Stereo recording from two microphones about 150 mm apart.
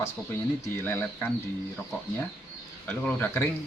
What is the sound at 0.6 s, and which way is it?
Speech, 15° left (ahead or behind).